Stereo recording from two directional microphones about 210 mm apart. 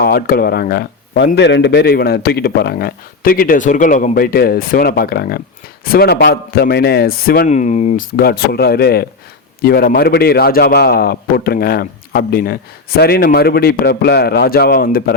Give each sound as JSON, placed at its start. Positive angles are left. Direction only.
{"t": 0.0, "sound": "a man's voice", "side_deg": 45}